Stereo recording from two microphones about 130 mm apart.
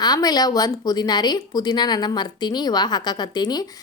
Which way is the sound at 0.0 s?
30° left (ahead or behind).